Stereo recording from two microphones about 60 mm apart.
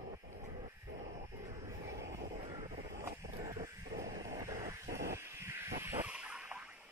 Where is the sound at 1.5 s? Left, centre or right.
Right.